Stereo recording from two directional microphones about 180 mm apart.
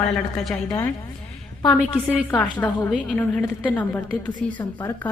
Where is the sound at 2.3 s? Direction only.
10° left (ahead or behind).